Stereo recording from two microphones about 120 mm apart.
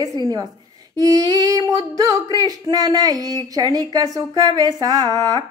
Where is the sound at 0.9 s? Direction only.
30° right (ahead or behind).